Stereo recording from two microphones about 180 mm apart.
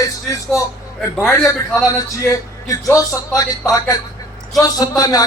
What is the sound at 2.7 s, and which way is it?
A man's voice, 20° left (ahead or behind).